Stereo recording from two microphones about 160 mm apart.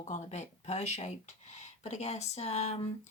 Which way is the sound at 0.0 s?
45° left (ahead or behind).